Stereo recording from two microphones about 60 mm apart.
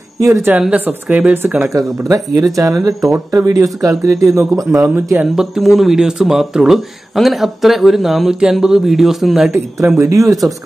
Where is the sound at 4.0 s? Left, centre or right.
Right.